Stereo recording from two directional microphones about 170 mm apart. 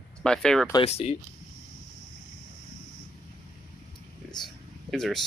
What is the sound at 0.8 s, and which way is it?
Speech, 35° left (ahead or behind).